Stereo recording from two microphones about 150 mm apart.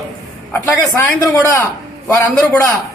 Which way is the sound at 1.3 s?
15° left (ahead or behind).